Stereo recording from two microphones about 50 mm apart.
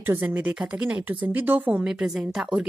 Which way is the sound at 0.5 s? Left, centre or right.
Right.